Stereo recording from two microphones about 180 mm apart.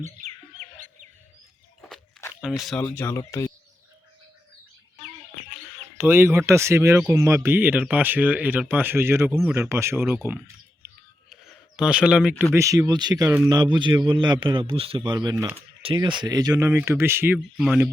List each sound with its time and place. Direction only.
0.0 s chicken: 40° right (ahead or behind)
2.6 s speech: centre (ahead or behind)
2.8 s speech: 15° left (ahead or behind)
6.0 s speech: 15° right (ahead or behind)
11.3 s bird: centre (ahead or behind)
12.5 s a man's voice: 20° right (ahead or behind)